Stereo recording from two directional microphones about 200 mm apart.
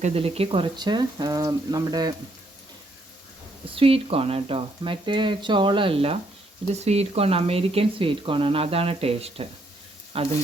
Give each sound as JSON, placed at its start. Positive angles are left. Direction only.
{"t": 0.0, "sound": "speech", "side_deg": -30}
{"t": 3.8, "sound": "speech", "side_deg": -30}